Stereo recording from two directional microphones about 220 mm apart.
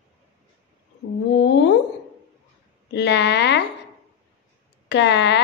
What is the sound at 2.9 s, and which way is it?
Speech, 50° left (ahead or behind).